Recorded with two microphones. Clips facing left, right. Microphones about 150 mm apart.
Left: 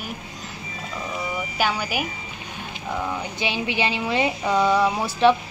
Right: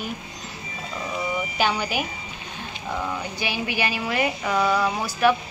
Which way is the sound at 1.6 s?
5° left (ahead or behind).